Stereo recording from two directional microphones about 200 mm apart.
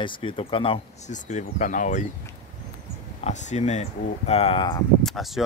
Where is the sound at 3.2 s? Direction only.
35° left (ahead or behind).